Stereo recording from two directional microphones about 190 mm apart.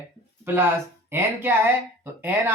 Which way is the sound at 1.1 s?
10° right (ahead or behind).